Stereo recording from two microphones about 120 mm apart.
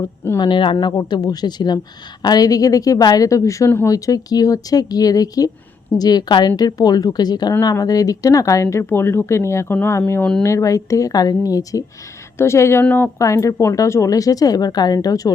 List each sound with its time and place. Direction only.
0.3 s speech: 40° left (ahead or behind); by 13.1 s 15° left (ahead or behind)
13.1 s speech: 25° left (ahead or behind)